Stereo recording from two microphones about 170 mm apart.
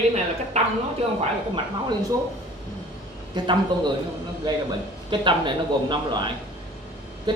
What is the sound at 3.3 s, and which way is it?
Speech, 25° right (ahead or behind).